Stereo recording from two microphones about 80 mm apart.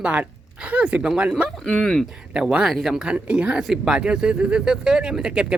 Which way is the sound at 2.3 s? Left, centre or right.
Centre.